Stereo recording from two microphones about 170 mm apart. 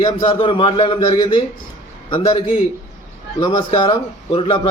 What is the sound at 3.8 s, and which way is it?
Speech, 30° left (ahead or behind).